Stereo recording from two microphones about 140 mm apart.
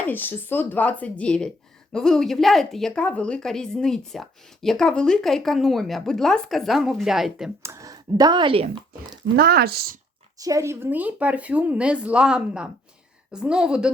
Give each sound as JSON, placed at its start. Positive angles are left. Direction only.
{"t": 0.0, "sound": "speech", "side_deg": 15}
{"t": 7.6, "sound": "speech", "side_deg": -20}
{"t": 9.4, "sound": "speech", "side_deg": -90}
{"t": 10.3, "sound": "speech", "side_deg": -25}